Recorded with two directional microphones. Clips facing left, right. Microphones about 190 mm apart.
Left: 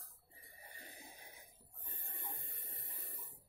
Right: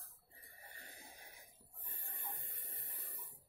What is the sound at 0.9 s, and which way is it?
Snort, 20° left (ahead or behind).